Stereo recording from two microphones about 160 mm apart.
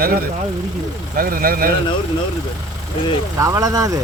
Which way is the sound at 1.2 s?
65° right (ahead or behind).